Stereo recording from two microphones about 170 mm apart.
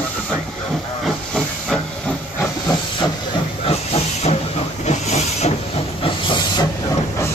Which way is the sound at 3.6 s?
35° left (ahead or behind).